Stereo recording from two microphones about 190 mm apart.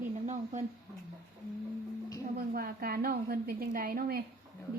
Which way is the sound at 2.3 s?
50° right (ahead or behind).